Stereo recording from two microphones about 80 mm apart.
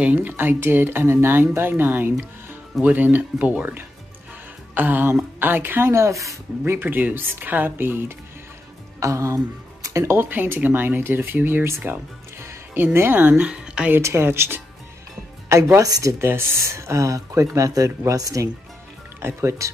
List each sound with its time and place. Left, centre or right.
0.0 s speech: centre; by 6.3 s right
6.6 s speech: right
9.0 s speech: right
10.3 s speech: right
13.9 s speech: right
16.3 s speech: right
19.2 s speech: right